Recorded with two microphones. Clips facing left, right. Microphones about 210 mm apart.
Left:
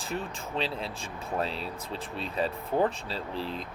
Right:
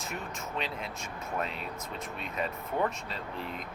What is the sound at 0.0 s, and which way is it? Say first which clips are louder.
Speech: left 4 dB; 30° left (ahead or behind).